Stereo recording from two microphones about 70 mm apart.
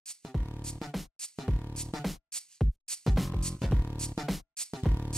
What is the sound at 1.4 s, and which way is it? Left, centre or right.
Music, centre.